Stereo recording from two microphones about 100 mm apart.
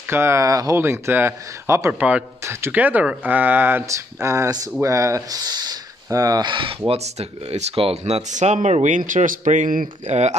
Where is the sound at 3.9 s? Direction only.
30° right (ahead or behind).